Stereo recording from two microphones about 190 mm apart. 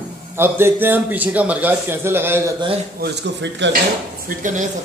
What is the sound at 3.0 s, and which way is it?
Speech, 65° right (ahead or behind).